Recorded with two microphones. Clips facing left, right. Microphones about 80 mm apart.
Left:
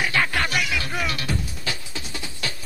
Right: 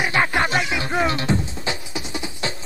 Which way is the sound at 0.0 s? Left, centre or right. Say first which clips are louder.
Right 3 dB; right.